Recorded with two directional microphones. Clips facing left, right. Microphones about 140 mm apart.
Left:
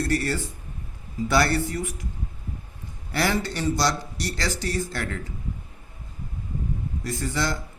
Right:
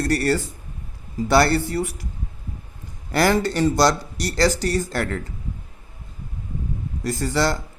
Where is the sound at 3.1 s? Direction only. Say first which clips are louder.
Right 6 dB; 45° right (ahead or behind).